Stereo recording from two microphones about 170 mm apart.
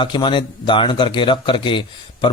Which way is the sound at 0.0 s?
25° left (ahead or behind).